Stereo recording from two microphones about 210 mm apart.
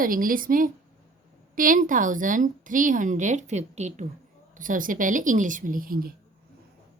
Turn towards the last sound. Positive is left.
turn(degrees=-40)  # may be behind; listen again after turning